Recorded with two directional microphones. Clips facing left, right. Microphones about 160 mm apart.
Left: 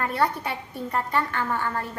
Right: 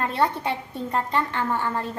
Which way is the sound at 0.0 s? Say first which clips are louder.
Right 1 dB; 25° right (ahead or behind).